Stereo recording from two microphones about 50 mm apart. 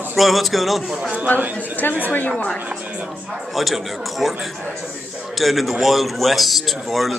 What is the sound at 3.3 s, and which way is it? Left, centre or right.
A man's voice, centre.